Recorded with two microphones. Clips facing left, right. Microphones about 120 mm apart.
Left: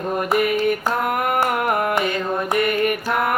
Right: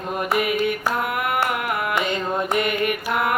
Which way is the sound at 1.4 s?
45° left (ahead or behind).